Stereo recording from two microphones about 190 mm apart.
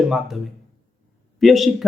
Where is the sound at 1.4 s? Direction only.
Centre (ahead or behind).